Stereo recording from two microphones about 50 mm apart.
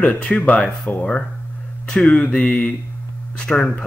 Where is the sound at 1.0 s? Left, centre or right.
Centre.